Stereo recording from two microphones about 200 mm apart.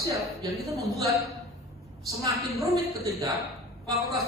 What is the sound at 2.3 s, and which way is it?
Speech, 15° right (ahead or behind).